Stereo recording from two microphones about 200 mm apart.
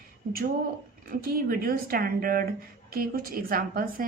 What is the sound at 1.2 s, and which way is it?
A woman's voice, 45° right (ahead or behind).